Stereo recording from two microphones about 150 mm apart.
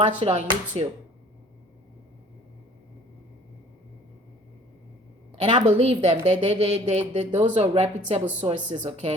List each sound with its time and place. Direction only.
0.2 s a woman's voice: 50° right (ahead or behind)
5.3 s a woman's voice: 45° right (ahead or behind)